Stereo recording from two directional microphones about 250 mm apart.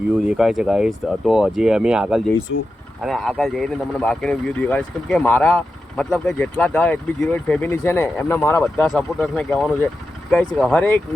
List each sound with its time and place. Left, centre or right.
0.3 s speech: centre